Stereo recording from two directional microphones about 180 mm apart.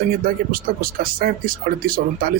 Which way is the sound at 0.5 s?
50° right (ahead or behind).